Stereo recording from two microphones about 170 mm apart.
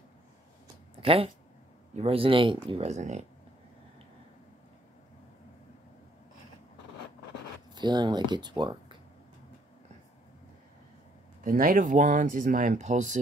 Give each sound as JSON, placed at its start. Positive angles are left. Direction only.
{"t": 1.0, "sound": "speech", "side_deg": -35}
{"t": 7.7, "sound": "speech", "side_deg": -25}
{"t": 11.4, "sound": "speech", "side_deg": -55}